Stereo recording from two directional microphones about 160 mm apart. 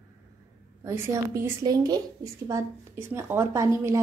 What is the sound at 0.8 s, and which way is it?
A woman's voice, 15° right (ahead or behind).